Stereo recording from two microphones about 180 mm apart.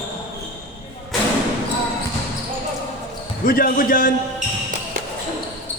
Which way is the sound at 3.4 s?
50° left (ahead or behind).